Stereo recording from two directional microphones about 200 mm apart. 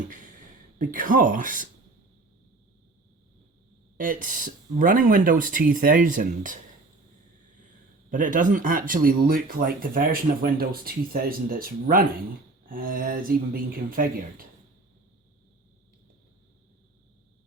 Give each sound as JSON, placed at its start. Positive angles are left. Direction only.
{"t": 0.8, "sound": "speech", "side_deg": -40}
{"t": 3.9, "sound": "speech", "side_deg": -45}
{"t": 8.1, "sound": "speech", "side_deg": -40}